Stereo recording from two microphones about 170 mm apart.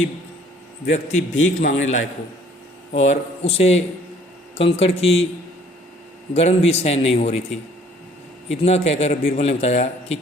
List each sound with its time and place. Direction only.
1.1 s a man's voice: 45° left (ahead or behind)
6.3 s a man's voice: 40° left (ahead or behind)
8.6 s a man's voice: 40° left (ahead or behind)